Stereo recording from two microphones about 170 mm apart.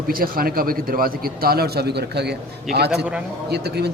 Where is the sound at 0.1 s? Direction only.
60° right (ahead or behind); by 2.3 s 75° right (ahead or behind).